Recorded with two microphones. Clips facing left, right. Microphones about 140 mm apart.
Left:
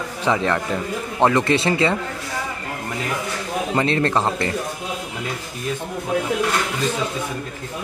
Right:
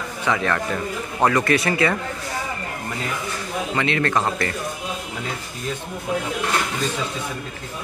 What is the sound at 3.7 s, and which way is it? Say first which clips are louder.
Speech: left 2 dB; 35° left (ahead or behind).